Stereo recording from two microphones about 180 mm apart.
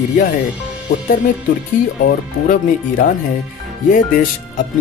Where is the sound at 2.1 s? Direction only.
45° left (ahead or behind).